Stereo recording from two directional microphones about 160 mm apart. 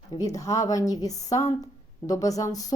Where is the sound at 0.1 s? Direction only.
20° left (ahead or behind).